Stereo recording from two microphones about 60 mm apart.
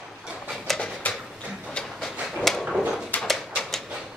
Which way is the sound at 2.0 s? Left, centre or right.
Centre.